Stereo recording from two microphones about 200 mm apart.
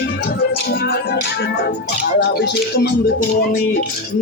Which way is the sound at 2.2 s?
60° left (ahead or behind).